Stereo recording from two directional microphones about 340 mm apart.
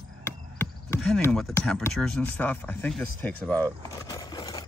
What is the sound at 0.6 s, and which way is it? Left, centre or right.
Speech, centre.